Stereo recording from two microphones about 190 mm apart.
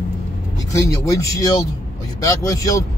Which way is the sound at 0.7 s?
15° left (ahead or behind).